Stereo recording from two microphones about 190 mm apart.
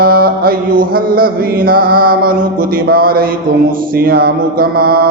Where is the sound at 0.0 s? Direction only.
50° right (ahead or behind).